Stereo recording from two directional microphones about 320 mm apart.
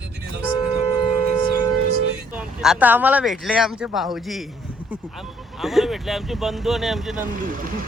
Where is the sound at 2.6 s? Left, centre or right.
Centre.